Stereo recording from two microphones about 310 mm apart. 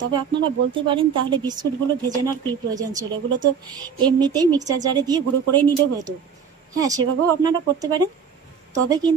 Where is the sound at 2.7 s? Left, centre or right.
Centre.